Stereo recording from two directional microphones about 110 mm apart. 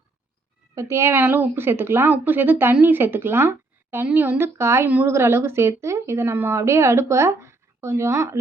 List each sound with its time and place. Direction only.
0.8 s a woman's voice: 25° right (ahead or behind)